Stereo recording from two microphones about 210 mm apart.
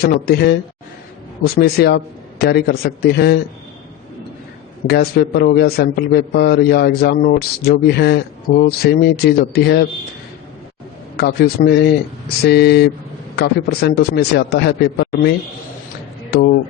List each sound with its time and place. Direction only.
0.0 s a man's voice: 50° left (ahead or behind)
4.9 s a man's voice: 50° left (ahead or behind)
11.2 s a man's voice: 50° left (ahead or behind)